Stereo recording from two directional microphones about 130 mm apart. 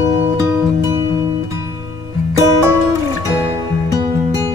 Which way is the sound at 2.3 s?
25° right (ahead or behind).